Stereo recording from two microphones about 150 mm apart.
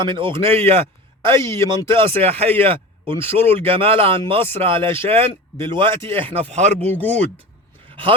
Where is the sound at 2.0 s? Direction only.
40° right (ahead or behind).